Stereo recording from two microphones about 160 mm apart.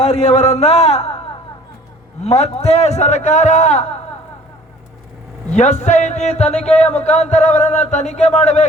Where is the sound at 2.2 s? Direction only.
40° left (ahead or behind).